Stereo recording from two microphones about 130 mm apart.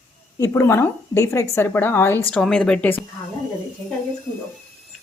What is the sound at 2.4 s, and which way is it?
Speech, 5° left (ahead or behind).